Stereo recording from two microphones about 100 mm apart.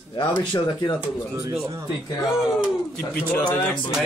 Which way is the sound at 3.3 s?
15° left (ahead or behind).